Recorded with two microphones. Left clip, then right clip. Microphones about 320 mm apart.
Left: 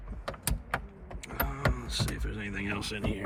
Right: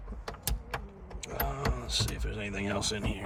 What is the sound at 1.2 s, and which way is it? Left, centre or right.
Power windows, centre.